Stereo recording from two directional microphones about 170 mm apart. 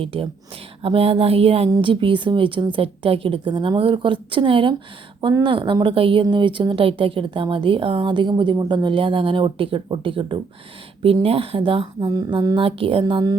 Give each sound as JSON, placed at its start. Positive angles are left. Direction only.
{"t": 0.0, "sound": "a woman's voice", "side_deg": -35}